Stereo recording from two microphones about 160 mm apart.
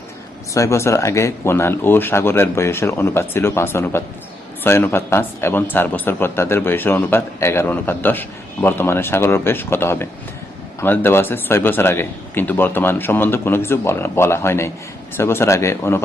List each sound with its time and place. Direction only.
0.5 s speech: 20° left (ahead or behind)